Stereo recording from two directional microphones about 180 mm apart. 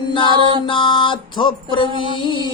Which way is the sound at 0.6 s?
25° left (ahead or behind).